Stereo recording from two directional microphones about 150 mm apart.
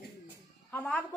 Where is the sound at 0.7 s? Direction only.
10° left (ahead or behind).